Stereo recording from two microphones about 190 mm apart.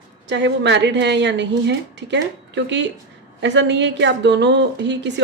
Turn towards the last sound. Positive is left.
turn(degrees=-65)  # may be behind; listen again after turning